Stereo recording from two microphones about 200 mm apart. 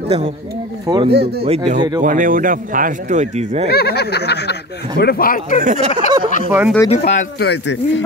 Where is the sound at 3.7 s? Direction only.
55° left (ahead or behind).